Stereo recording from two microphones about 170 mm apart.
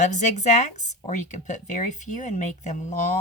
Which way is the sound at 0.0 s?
45° left (ahead or behind).